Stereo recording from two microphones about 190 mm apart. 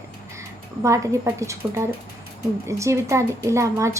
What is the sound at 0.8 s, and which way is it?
Speech, 15° right (ahead or behind).